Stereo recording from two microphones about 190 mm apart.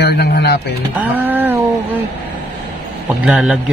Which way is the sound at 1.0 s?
10° right (ahead or behind).